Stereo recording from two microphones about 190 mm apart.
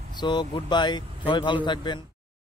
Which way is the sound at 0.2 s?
25° left (ahead or behind).